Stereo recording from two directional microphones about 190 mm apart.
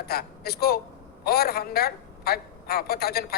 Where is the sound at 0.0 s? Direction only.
55° left (ahead or behind).